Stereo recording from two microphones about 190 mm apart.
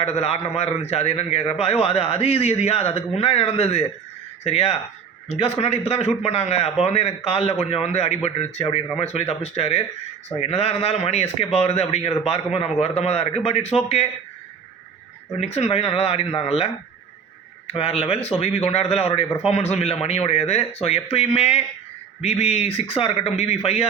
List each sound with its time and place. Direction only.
0.0 s a man's voice: 35° left (ahead or behind)
15.4 s a man's voice: 35° left (ahead or behind)